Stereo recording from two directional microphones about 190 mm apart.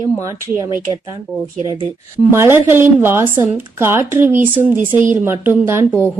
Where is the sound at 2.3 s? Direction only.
15° right (ahead or behind).